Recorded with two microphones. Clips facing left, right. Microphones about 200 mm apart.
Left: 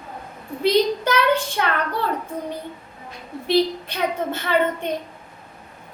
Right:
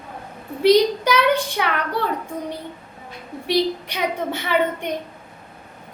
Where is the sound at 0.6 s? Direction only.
15° right (ahead or behind).